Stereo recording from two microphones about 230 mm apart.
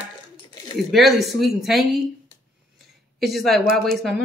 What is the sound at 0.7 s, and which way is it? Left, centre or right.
Speech, centre.